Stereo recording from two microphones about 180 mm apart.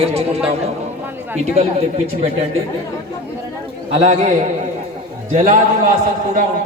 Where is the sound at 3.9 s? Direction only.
35° right (ahead or behind).